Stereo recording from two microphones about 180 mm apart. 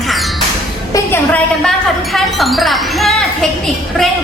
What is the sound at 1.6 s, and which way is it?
Speech, centre (ahead or behind).